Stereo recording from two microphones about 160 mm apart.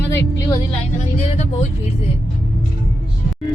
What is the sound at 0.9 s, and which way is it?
Speech, 45° left (ahead or behind).